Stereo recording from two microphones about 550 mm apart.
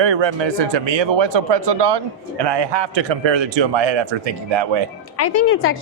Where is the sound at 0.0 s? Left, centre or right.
Right.